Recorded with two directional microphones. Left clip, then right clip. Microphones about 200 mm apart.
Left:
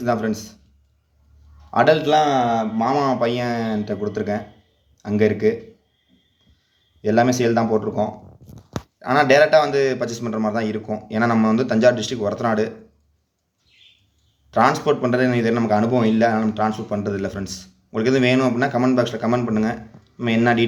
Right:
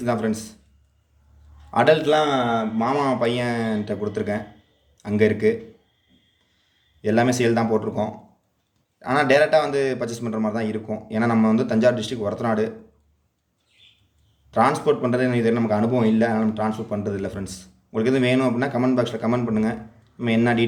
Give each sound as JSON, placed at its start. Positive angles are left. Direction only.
{"t": 0.0, "sound": "a man's voice", "side_deg": -5}
{"t": 1.7, "sound": "a man's voice", "side_deg": -5}
{"t": 7.0, "sound": "a man's voice", "side_deg": -10}
{"t": 14.5, "sound": "a man's voice", "side_deg": 0}